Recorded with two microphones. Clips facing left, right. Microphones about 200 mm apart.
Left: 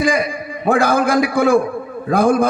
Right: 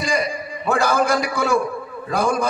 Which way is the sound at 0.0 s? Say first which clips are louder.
Left 5 dB; 55° left (ahead or behind).